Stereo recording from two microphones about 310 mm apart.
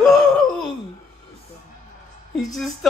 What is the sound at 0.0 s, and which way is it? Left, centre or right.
Gasp, centre.